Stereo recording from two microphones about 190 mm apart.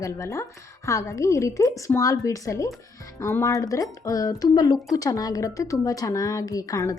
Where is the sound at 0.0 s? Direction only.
15° left (ahead or behind).